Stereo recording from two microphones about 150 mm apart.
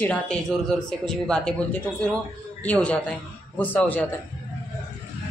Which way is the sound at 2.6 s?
10° left (ahead or behind).